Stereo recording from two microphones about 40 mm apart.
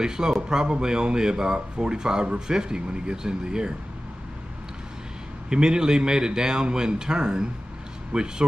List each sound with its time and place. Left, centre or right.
0.0 s speech: centre
5.5 s speech: centre